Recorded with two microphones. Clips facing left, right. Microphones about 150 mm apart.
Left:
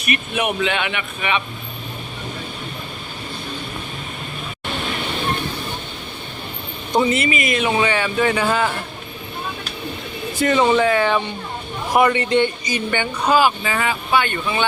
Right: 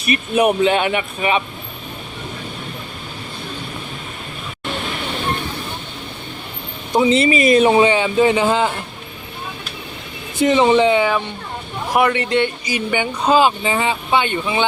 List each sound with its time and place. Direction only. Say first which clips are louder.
0.0 s speech: right 6 dB; 35° right (ahead or behind)
7.1 s speech: right 7 dB; 30° right (ahead or behind)
10.4 s speech: right 3 dB; 15° right (ahead or behind)
11.9 s speech: left 1 dB; centre (ahead or behind)
13.2 s speech: right 2 dB; 25° right (ahead or behind)